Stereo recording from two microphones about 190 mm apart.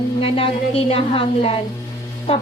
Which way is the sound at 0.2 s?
30° left (ahead or behind).